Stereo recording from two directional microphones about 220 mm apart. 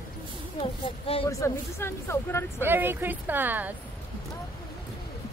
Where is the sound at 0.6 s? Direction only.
25° left (ahead or behind).